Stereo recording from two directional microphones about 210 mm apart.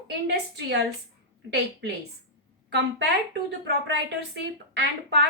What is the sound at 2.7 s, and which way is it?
A woman's voice, 55° right (ahead or behind).